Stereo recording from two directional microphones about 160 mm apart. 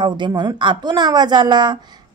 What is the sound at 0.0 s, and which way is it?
Speech, 30° right (ahead or behind).